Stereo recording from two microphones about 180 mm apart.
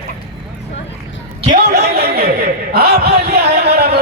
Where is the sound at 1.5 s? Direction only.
60° right (ahead or behind).